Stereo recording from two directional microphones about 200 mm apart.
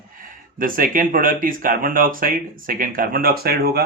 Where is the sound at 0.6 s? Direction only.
45° right (ahead or behind).